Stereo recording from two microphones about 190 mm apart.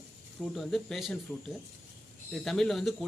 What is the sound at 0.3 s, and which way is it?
Speech, centre (ahead or behind).